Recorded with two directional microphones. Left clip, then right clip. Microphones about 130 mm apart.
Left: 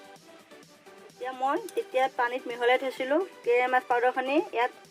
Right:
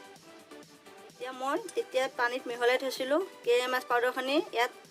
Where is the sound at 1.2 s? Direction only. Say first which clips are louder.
Left 4 dB; 30° left (ahead or behind).